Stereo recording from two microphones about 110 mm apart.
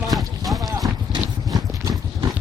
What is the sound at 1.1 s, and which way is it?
Clip-clop, 35° right (ahead or behind).